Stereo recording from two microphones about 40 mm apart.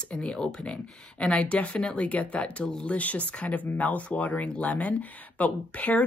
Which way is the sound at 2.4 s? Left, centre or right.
Left.